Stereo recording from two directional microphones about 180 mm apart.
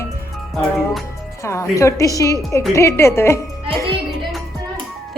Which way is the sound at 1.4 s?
15° left (ahead or behind).